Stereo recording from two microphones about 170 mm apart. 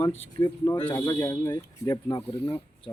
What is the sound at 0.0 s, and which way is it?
Speech, 35° left (ahead or behind).